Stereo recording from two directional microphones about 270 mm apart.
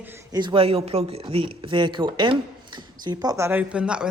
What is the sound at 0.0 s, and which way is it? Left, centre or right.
Speech, centre.